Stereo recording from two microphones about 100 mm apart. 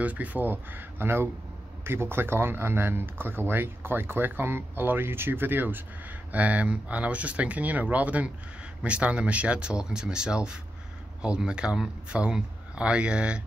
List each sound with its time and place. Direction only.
0.0 s speech: 15° right (ahead or behind)